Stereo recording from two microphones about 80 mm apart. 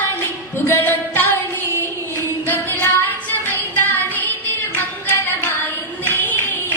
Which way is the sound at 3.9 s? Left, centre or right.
Left.